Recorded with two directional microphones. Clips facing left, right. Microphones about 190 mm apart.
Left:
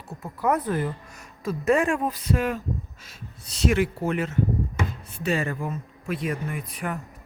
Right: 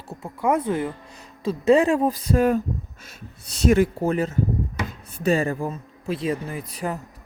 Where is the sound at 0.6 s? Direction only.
25° right (ahead or behind); by 2.6 s 40° right (ahead or behind).